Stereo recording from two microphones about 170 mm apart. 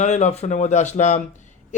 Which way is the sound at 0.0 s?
40° left (ahead or behind).